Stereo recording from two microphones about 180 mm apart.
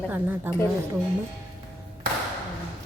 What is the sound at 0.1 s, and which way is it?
Speech, 10° right (ahead or behind).